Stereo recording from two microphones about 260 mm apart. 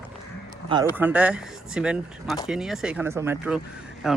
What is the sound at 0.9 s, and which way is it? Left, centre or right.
Speech, centre.